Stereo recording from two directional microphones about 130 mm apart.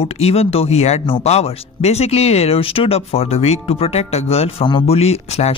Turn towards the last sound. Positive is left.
turn(degrees=55)  # may be behind; listen again after turning